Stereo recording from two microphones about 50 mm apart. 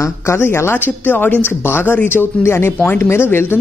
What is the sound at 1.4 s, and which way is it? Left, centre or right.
Speech, left.